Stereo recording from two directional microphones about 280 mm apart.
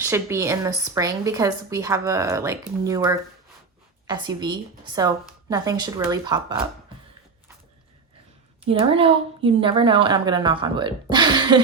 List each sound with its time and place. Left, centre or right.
0.0 s speech: centre
8.6 s speech: centre